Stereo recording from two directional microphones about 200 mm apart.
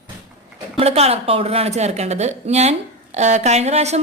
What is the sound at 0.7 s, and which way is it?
A woman's voice, 30° right (ahead or behind).